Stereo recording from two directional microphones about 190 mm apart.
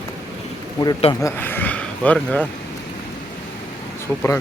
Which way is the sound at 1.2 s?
10° left (ahead or behind).